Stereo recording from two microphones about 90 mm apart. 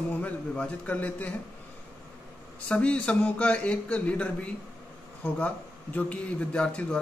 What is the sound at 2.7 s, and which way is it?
Speech, 15° left (ahead or behind).